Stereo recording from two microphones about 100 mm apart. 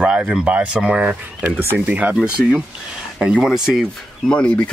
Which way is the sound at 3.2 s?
5° right (ahead or behind).